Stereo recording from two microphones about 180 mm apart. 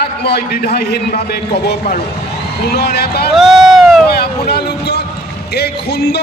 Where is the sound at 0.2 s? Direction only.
65° left (ahead or behind).